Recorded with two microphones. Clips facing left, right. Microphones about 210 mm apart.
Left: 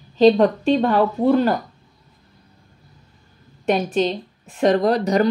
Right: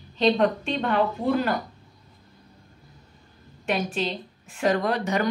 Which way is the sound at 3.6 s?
35° left (ahead or behind).